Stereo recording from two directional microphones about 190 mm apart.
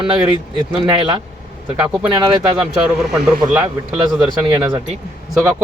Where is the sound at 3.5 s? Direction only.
10° right (ahead or behind).